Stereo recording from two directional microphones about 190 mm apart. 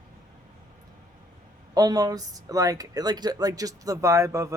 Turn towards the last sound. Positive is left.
turn(degrees=-15)  # may be behind; listen again after turning